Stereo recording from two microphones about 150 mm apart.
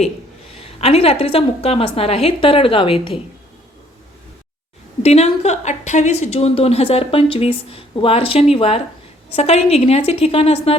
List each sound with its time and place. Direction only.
0.6 s a woman's voice: 40° left (ahead or behind)
5.0 s a woman's voice: 45° left (ahead or behind)